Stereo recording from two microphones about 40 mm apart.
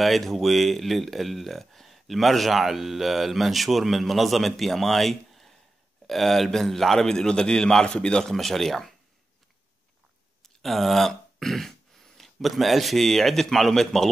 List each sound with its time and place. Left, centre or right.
0.0 s a man's voice: centre
7.8 s a man's voice: left
8.3 s speech: centre
10.6 s speech: centre